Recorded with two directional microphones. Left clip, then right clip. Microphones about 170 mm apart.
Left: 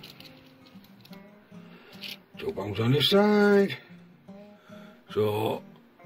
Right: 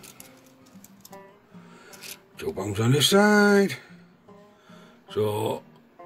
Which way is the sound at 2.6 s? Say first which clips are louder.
Right 3 dB; 20° right (ahead or behind).